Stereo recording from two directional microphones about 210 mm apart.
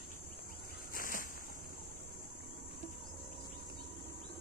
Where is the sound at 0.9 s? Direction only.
40° left (ahead or behind).